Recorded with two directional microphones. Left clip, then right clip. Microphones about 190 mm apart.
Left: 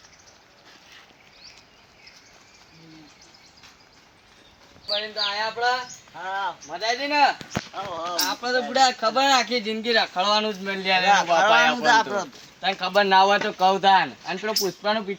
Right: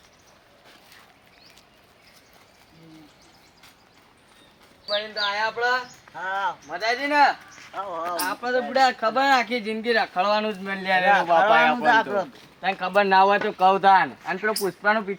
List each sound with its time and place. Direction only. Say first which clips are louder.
4.9 s a man's voice: right 1 dB; 5° right (ahead or behind)
11.3 s speech: even; 25° right (ahead or behind)
12.6 s speech: even; 10° left (ahead or behind)